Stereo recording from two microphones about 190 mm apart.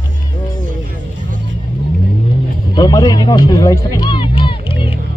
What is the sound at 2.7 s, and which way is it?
Music, 20° left (ahead or behind).